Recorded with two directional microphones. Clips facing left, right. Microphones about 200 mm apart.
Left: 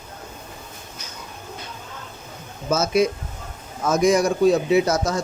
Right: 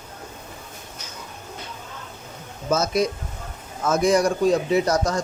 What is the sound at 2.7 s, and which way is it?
A man's voice, 5° left (ahead or behind).